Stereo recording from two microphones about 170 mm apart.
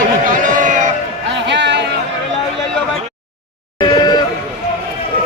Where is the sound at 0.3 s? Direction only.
50° right (ahead or behind).